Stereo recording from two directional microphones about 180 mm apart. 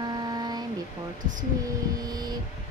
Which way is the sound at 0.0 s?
25° right (ahead or behind).